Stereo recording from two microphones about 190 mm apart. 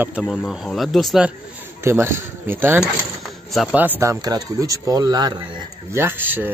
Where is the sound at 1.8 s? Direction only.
15° right (ahead or behind).